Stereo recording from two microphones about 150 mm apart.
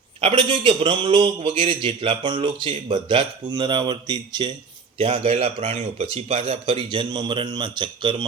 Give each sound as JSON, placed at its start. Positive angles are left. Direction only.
{"t": 0.2, "sound": "speech", "side_deg": -40}
{"t": 4.9, "sound": "speech", "side_deg": -40}